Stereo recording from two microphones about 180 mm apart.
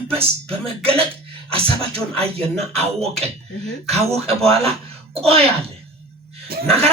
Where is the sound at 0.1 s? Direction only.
35° right (ahead or behind).